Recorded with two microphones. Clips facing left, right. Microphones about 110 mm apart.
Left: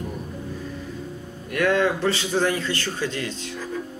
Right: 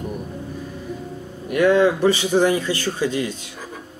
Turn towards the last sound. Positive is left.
turn(degrees=-15)  # may be behind; listen again after turning